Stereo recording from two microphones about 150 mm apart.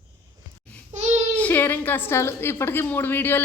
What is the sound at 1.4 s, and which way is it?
A woman's voice, 15° left (ahead or behind).